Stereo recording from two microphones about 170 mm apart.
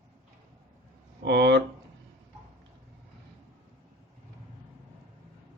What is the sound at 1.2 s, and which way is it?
Speech, 90° right.